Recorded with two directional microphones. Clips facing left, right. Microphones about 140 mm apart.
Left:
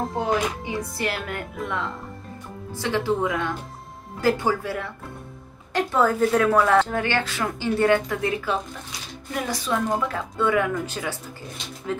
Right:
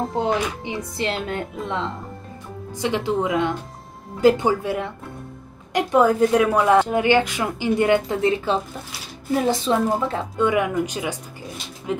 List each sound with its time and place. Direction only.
0.1 s a woman's voice: 25° right (ahead or behind)